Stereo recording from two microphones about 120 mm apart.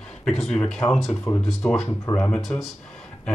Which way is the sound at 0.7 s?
20° left (ahead or behind).